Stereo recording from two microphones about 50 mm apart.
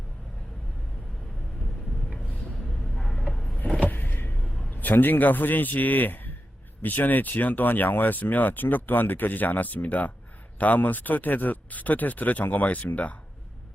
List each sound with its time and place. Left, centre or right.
2.6 s vehicle: centre
3.8 s vehicle: left
4.7 s a man's voice: left